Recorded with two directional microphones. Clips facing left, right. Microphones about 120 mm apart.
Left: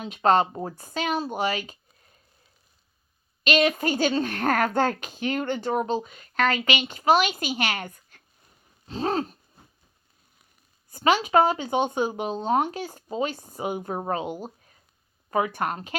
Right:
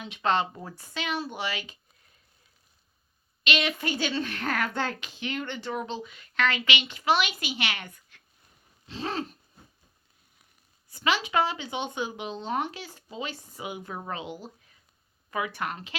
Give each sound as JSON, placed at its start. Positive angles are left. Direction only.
{"t": 0.0, "sound": "speech", "side_deg": 40}
{"t": 3.4, "sound": "speech", "side_deg": 45}
{"t": 8.9, "sound": "owl", "side_deg": 40}
{"t": 10.9, "sound": "speech", "side_deg": 45}